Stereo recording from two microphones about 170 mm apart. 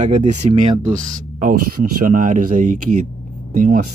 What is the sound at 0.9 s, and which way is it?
Speech, 50° right (ahead or behind).